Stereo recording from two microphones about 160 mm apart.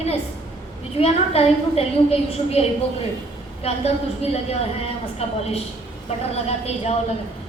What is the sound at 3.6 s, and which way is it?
A woman's voice, 40° left (ahead or behind).